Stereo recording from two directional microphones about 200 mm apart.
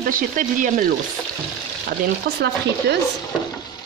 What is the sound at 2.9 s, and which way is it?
Stir, 60° right (ahead or behind).